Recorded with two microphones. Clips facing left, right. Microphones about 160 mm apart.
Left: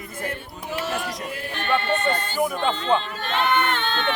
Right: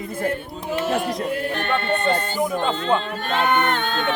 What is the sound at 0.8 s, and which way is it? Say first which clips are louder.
Speech: right 7 dB; 55° right (ahead or behind).